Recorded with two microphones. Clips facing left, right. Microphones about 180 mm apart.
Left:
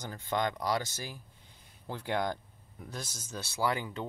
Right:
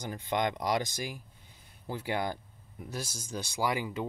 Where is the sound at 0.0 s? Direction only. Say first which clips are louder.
Right 2 dB; 15° right (ahead or behind).